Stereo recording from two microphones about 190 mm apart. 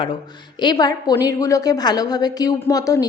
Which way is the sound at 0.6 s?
20° left (ahead or behind).